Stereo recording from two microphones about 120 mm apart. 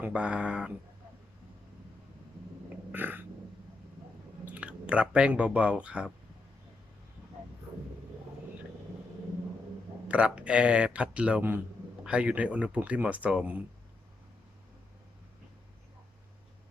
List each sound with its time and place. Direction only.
0.0 s a man's voice: 10° right (ahead or behind)
2.6 s a sound: 15° right (ahead or behind)
4.4 s speech: 10° right (ahead or behind)
10.1 s a man's voice: 10° right (ahead or behind)